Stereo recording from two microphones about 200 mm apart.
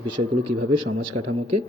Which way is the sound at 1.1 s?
90° right.